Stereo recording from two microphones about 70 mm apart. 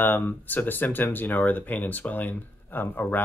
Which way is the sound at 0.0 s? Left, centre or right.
Left.